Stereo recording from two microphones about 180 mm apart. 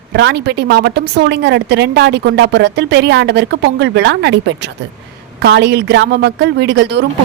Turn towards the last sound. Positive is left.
turn(degrees=-70)  # may be behind; listen again after turning